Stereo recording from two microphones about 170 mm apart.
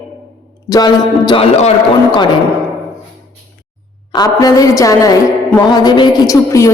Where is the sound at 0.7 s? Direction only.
25° left (ahead or behind).